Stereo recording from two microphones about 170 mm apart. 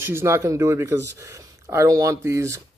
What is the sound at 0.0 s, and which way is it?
Speech, 15° right (ahead or behind).